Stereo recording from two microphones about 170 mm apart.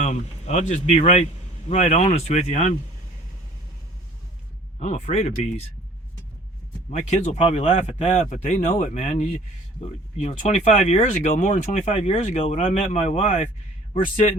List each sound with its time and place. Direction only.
0.0 s speech: 40° left (ahead or behind)
4.8 s speech: 45° left (ahead or behind)
6.9 s speech: 40° left (ahead or behind)